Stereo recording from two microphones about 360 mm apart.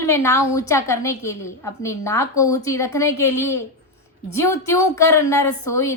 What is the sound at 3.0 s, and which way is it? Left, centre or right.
A woman's voice, left.